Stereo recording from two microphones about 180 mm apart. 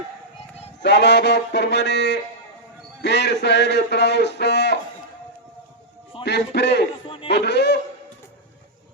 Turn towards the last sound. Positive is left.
turn(degrees=70)  # may be behind; listen again after turning